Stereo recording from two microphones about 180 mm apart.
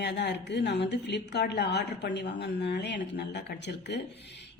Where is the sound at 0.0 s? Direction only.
70° left (ahead or behind).